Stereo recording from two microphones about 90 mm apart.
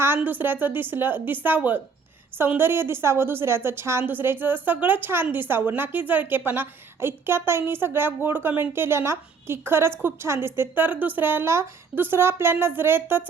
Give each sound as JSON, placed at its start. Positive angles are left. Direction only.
{"t": 0.2, "sound": "a woman's voice", "side_deg": -20}